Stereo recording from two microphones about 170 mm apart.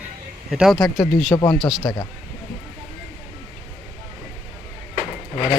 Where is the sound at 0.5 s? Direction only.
Centre (ahead or behind).